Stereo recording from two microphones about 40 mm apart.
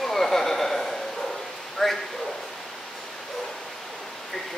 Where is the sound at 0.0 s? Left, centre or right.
Centre.